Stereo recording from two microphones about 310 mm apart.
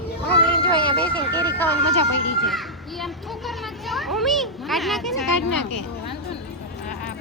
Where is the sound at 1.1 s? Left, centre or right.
Left.